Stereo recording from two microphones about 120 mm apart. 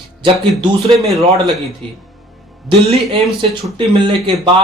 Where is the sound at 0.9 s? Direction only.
55° right (ahead or behind).